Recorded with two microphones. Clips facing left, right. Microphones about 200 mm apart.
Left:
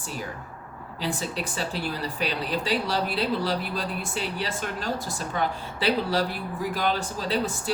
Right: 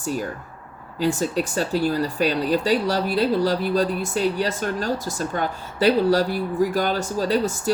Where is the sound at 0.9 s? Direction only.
45° right (ahead or behind).